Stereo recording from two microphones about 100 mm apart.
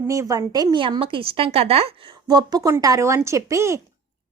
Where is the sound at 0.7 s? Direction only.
55° right (ahead or behind); by 1.9 s 85° right.